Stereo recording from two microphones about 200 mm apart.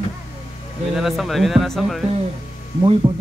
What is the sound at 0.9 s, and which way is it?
Speech, centre (ahead or behind).